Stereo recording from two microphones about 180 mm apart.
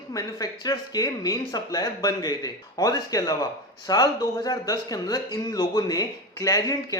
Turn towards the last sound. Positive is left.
turn(degrees=20)  # may be behind; listen again after turning